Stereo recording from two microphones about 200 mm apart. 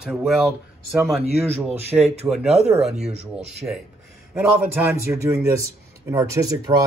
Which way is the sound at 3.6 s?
15° right (ahead or behind).